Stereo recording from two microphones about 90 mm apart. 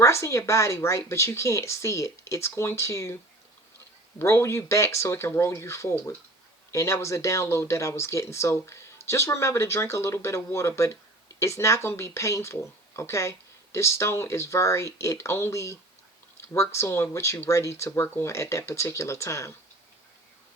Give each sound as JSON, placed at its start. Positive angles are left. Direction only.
{"t": 0.0, "sound": "speech", "side_deg": 35}
{"t": 4.2, "sound": "speech", "side_deg": 30}